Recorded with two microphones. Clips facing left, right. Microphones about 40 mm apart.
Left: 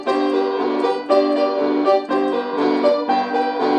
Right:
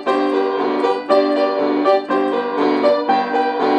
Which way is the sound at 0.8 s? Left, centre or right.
Right.